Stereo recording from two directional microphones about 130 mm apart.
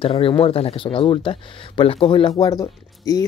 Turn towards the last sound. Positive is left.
turn(degrees=25)  # may be behind; listen again after turning